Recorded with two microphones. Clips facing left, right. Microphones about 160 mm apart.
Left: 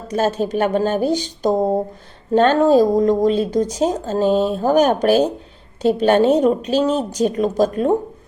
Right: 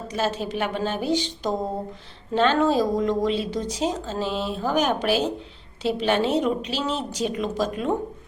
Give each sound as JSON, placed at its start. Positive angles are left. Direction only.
{"t": 0.1, "sound": "speech", "side_deg": 45}